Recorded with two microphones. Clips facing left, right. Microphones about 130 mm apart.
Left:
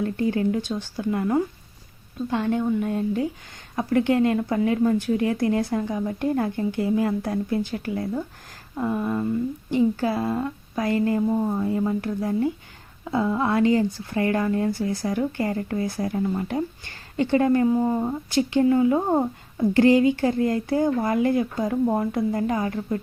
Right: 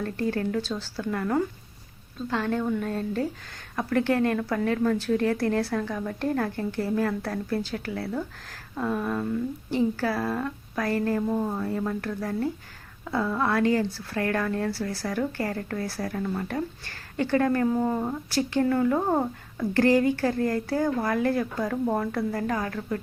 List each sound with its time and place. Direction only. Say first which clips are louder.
0.0 s a woman's voice: left 4 dB; 15° left (ahead or behind)